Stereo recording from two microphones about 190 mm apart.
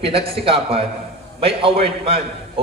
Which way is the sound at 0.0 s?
30° right (ahead or behind).